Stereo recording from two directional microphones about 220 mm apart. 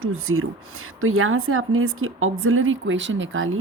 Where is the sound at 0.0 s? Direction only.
70° right (ahead or behind).